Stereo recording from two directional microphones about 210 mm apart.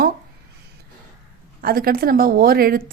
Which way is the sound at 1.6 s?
45° right (ahead or behind).